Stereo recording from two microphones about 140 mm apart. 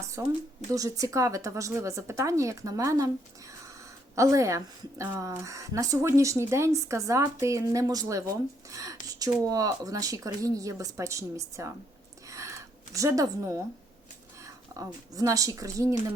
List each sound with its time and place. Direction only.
0.2 s speech: 20° right (ahead or behind)
4.1 s speech: 20° right (ahead or behind)
12.3 s a sound: 20° right (ahead or behind)
15.1 s speech: 25° right (ahead or behind)